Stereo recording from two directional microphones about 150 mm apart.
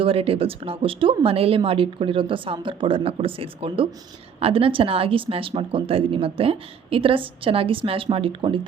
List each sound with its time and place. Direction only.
0.0 s speech: 35° right (ahead or behind)